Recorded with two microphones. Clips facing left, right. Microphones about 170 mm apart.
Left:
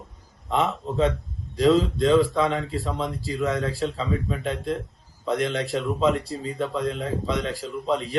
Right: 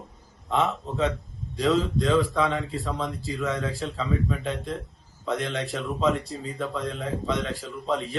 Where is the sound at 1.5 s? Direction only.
Centre (ahead or behind).